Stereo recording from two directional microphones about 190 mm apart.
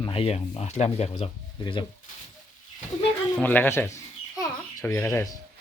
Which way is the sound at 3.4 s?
10° left (ahead or behind).